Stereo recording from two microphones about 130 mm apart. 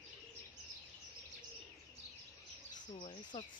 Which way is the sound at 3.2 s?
35° left (ahead or behind).